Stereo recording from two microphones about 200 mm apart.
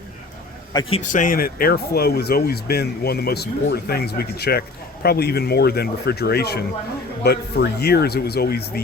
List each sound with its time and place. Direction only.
0.7 s speech: 25° left (ahead or behind); by 8.8 s 50° left (ahead or behind)